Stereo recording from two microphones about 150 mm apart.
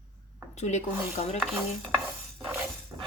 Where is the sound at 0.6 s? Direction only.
50° left (ahead or behind).